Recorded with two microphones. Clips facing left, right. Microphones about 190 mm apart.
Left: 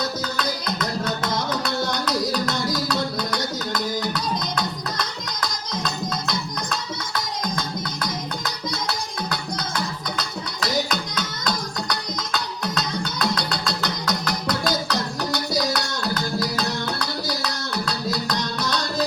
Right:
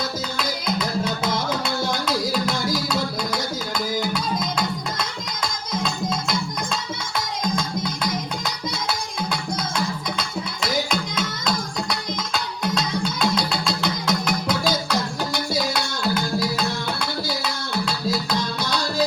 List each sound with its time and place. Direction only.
1.8 s music: centre (ahead or behind)
9.3 s music: centre (ahead or behind)
18.3 s music: 30° right (ahead or behind)